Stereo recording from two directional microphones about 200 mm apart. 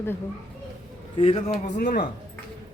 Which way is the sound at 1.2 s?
30° left (ahead or behind).